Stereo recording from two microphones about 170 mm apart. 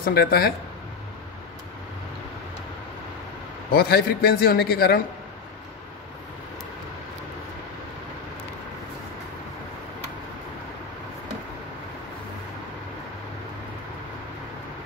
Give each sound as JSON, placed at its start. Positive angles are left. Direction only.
{"t": 0.0, "sound": "a man's voice", "side_deg": 65}
{"t": 3.7, "sound": "a man's voice", "side_deg": 65}